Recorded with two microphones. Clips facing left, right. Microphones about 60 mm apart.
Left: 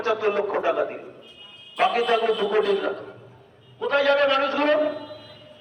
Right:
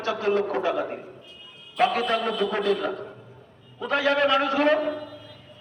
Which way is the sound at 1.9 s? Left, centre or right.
Centre.